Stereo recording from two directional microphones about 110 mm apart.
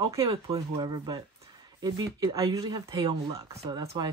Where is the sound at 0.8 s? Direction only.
40° right (ahead or behind).